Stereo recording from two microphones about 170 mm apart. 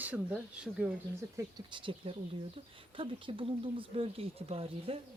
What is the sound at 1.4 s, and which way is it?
Speech, 25° right (ahead or behind).